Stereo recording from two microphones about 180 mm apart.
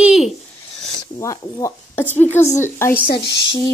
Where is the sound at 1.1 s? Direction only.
15° left (ahead or behind).